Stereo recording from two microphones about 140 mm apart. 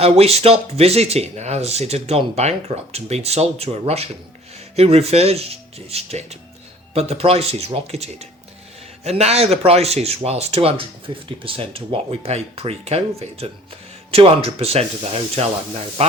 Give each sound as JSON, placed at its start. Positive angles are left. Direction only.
{"t": 0.0, "sound": "speech", "side_deg": -45}